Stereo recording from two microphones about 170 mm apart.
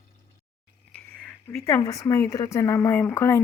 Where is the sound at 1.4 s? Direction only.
15° left (ahead or behind).